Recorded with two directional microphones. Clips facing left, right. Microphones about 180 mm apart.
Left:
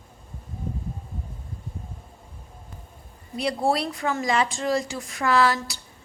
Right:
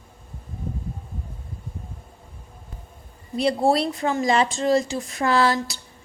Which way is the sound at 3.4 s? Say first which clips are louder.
Right 4 dB; 25° right (ahead or behind).